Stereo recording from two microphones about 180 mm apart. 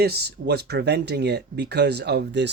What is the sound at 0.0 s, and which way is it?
Speech, 60° right (ahead or behind).